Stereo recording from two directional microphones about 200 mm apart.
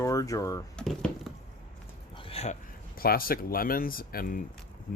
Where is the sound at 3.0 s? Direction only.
45° left (ahead or behind).